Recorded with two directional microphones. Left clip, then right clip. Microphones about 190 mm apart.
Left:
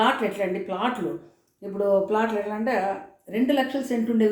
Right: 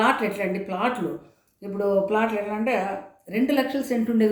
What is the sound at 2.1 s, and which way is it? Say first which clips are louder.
Speech: right 1 dB; 10° right (ahead or behind).